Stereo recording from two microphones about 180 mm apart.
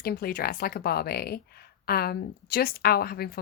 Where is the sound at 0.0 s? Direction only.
55° left (ahead or behind).